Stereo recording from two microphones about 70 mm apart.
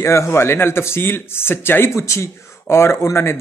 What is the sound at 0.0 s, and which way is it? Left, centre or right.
Speech, left.